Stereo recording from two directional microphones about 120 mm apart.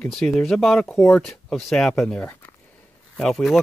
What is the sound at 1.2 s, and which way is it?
Speech, centre (ahead or behind).